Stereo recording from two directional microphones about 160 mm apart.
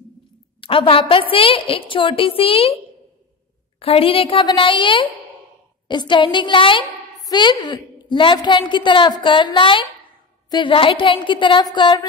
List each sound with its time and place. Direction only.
0.6 s a woman's voice: 35° left (ahead or behind)
3.8 s a woman's voice: 35° left (ahead or behind)